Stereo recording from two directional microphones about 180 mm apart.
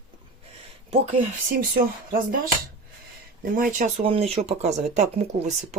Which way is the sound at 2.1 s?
50° right (ahead or behind).